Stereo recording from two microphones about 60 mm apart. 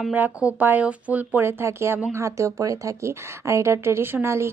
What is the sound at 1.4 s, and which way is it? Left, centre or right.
Speech, right.